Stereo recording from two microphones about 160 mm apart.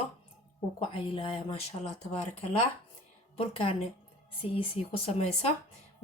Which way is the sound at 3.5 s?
35° left (ahead or behind).